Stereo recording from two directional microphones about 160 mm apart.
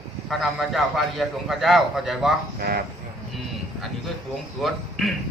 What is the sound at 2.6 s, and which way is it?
Speech, 70° right (ahead or behind).